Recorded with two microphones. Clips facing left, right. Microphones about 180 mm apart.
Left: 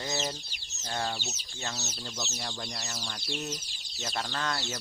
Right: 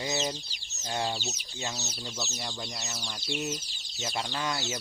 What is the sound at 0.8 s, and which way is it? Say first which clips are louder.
Speech: right 2 dB; 15° right (ahead or behind).